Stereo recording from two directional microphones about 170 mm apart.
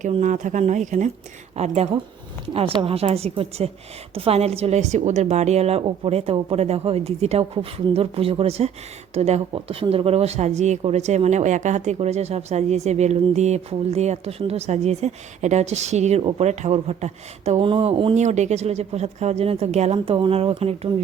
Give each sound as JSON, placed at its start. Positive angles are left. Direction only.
{"t": 0.0, "sound": "a woman's voice", "side_deg": -45}